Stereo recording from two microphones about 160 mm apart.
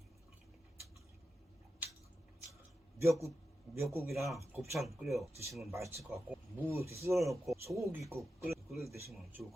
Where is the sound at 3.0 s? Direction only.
20° right (ahead or behind).